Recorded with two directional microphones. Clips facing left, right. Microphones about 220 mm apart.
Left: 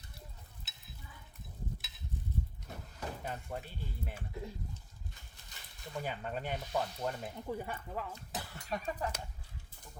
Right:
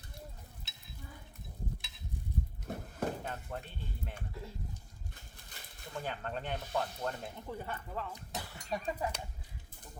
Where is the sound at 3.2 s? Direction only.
10° left (ahead or behind).